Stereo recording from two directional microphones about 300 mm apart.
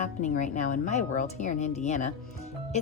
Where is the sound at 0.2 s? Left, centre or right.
Left.